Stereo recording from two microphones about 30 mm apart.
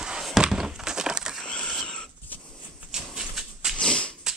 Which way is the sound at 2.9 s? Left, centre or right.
Centre.